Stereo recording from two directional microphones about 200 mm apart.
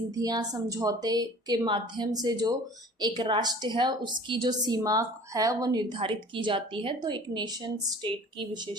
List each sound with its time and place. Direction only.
0.1 s a woman's voice: 20° right (ahead or behind)